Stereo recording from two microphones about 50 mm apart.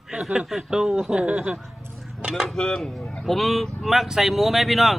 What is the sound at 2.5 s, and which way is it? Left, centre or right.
Speech, centre.